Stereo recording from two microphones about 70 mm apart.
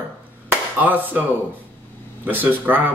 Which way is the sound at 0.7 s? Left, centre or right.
Right.